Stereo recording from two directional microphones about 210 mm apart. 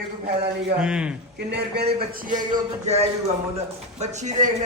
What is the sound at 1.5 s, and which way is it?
Speech, 55° right (ahead or behind).